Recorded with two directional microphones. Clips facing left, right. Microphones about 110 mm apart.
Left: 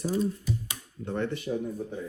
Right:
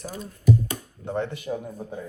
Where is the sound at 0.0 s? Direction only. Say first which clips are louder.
Even; 45° right (ahead or behind).